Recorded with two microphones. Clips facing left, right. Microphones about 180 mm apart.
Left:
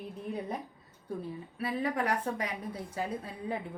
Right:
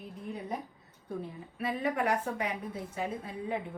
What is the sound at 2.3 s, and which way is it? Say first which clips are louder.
A woman's voice: right 1 dB; 35° left (ahead or behind).